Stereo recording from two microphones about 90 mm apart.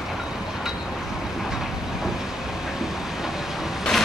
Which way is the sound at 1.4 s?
5° right (ahead or behind).